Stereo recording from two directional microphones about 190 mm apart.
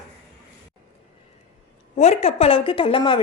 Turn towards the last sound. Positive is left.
turn(degrees=25)  # may be behind; listen again after turning